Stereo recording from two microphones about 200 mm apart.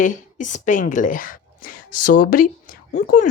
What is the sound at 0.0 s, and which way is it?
Speech, 40° left (ahead or behind).